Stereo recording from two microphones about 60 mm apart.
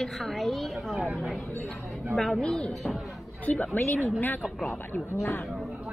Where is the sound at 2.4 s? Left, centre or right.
Centre.